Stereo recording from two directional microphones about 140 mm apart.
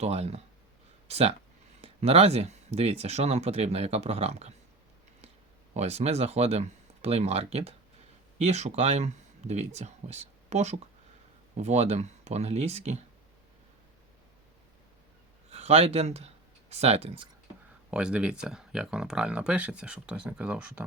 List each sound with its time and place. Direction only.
0.0 s speech: 50° right (ahead or behind)
5.7 s speech: 50° right (ahead or behind)
15.4 s speech: 50° right (ahead or behind)
17.9 s speech: 5° right (ahead or behind)